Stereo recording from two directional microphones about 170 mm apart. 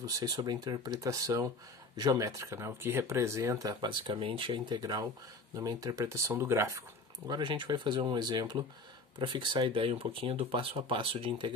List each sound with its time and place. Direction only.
0.0 s speech: 20° right (ahead or behind)
7.2 s speech: 25° right (ahead or behind)